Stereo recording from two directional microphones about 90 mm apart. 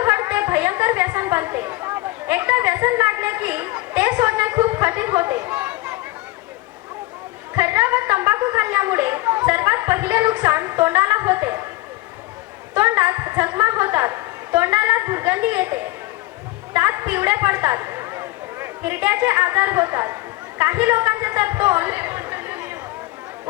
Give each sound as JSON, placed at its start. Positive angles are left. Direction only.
{"t": 0.0, "sound": "a woman's voice", "side_deg": -25}
{"t": 7.5, "sound": "a woman's voice", "side_deg": -25}
{"t": 12.7, "sound": "a woman's voice", "side_deg": -25}
{"t": 20.6, "sound": "a sound", "side_deg": -25}